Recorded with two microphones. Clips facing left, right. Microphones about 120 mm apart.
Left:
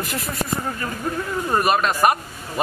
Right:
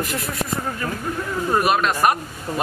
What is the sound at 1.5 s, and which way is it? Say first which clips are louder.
Speech: even; centre (ahead or behind).